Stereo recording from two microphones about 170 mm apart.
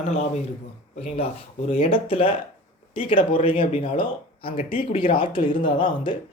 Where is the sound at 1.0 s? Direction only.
40° left (ahead or behind).